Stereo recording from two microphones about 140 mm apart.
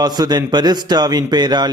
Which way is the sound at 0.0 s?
30° right (ahead or behind).